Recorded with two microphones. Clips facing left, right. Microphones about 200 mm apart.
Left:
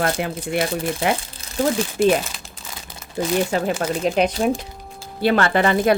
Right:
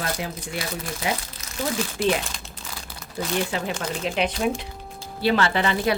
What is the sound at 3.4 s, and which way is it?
A woman's voice, 45° left (ahead or behind).